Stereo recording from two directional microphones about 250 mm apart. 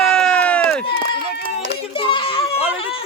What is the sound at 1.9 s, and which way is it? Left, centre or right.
Children playing, left.